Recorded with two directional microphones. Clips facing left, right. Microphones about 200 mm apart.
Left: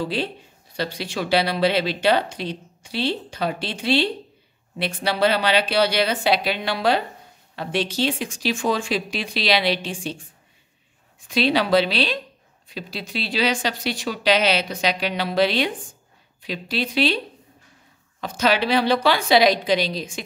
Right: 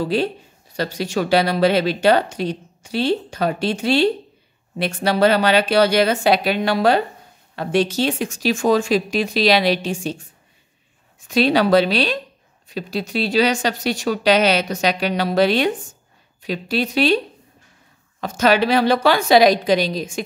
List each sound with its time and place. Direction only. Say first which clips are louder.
0.0 s speech: right 5 dB; 45° right (ahead or behind)
18.2 s speech: right 4 dB; 45° right (ahead or behind)